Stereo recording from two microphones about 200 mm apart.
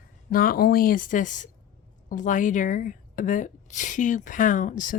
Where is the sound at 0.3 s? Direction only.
45° left (ahead or behind).